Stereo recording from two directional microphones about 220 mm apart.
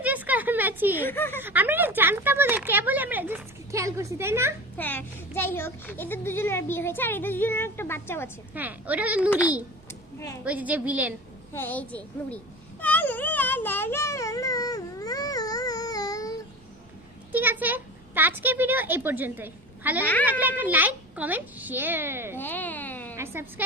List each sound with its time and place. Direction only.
0.0 s a sound: 5° right (ahead or behind)
1.0 s speech: 10° left (ahead or behind)
1.4 s speech: 10° right (ahead or behind)
4.8 s speech: 10° left (ahead or behind)
8.5 s speech: 5° right (ahead or behind)
10.4 s speech: 5° right (ahead or behind)
11.5 s speech: 10° left (ahead or behind)
12.8 s a sound: 10° left (ahead or behind)
17.3 s speech: 10° right (ahead or behind)
22.4 s speech: 10° left (ahead or behind)
23.1 s a woman's voice: 10° right (ahead or behind)